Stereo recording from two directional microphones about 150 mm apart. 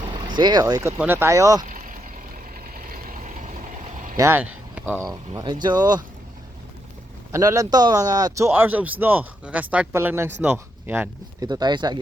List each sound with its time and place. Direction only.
0.1 s speech: 30° right (ahead or behind)
1.6 s vehicle: 65° right (ahead or behind)
4.2 s a sound: 15° right (ahead or behind)
5.0 s speech: 30° right (ahead or behind)
7.3 s speech: 20° right (ahead or behind)
11.3 s speech: 25° right (ahead or behind)